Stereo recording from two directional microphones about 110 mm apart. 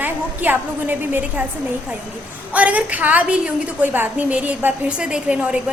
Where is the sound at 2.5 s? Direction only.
15° right (ahead or behind).